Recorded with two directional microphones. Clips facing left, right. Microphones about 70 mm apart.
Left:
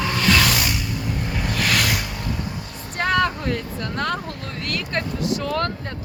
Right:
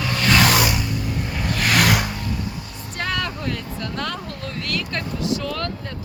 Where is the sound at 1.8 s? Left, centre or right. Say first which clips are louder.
Right 5 dB; right.